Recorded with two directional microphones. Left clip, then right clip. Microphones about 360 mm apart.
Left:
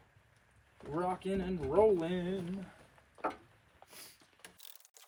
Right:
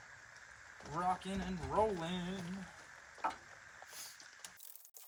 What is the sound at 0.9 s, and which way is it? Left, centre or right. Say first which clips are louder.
Speech: left 2 dB; centre.